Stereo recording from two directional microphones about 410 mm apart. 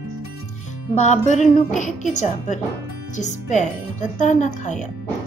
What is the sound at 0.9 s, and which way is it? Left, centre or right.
A woman's voice, centre.